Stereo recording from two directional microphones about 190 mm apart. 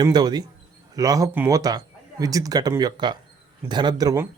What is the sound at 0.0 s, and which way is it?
Speech, 20° right (ahead or behind).